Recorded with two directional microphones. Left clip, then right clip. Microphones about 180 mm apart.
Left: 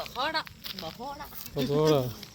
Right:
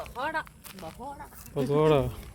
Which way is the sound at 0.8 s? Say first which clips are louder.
Right 2 dB; 20° left (ahead or behind).